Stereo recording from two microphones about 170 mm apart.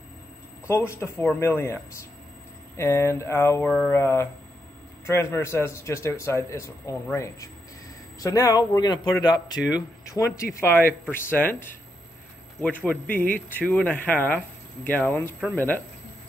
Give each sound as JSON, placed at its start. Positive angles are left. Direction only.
{"t": 0.7, "sound": "a man's voice", "side_deg": 15}
{"t": 2.8, "sound": "a man's voice", "side_deg": 15}
{"t": 13.1, "sound": "a man's voice", "side_deg": 10}